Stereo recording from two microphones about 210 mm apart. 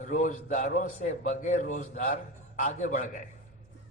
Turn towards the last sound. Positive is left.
turn(degrees=35)  # may be behind; listen again after turning